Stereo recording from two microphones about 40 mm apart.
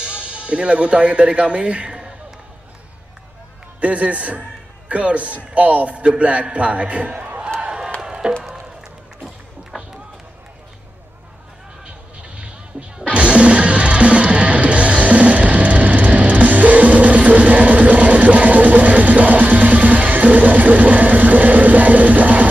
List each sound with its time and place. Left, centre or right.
0.0 s speech: right
3.8 s a man's voice: right
7.6 s crowd: right
8.0 s music: right
11.8 s music: right